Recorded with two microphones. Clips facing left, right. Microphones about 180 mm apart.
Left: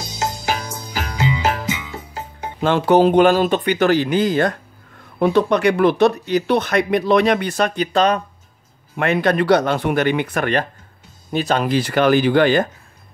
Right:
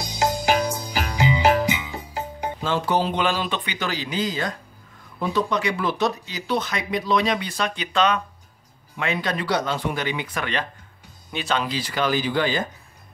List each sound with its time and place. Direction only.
0.7 s music: 15° right (ahead or behind)
2.6 s speech: 60° left (ahead or behind); by 8.2 s 40° left (ahead or behind)
8.9 s speech: 60° left (ahead or behind)